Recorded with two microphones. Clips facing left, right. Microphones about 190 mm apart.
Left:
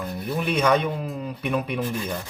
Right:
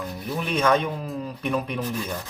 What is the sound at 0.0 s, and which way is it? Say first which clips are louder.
Speech: left 2 dB; centre (ahead or behind).